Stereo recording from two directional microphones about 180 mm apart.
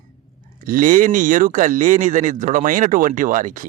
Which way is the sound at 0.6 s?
50° right (ahead or behind).